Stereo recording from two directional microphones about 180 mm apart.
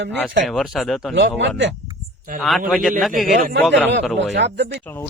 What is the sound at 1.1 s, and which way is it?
Speech, 80° right.